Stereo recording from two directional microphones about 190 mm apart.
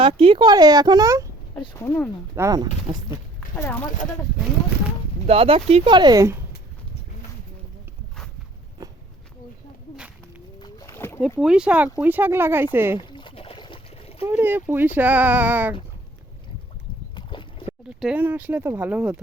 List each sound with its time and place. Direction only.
0.0 s speech: 30° right (ahead or behind)
1.8 s speech: 15° left (ahead or behind)
2.3 s speech: 15° right (ahead or behind)
3.5 s speech: 10° left (ahead or behind)
5.2 s speech: 30° right (ahead or behind); by 6.4 s 15° right (ahead or behind)
10.6 s a sound: 15° left (ahead or behind)
11.3 s speech: 5° right (ahead or behind)
13.1 s boat: 25° left (ahead or behind)
14.3 s speech: 10° right (ahead or behind)
17.2 s a sound: 25° left (ahead or behind)
17.7 s speech: 5° right (ahead or behind)